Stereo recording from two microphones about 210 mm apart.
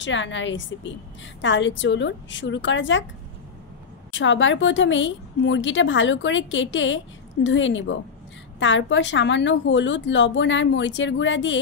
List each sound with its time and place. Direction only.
0.0 s a woman's voice: 60° left (ahead or behind)
4.1 s a woman's voice: 60° left (ahead or behind)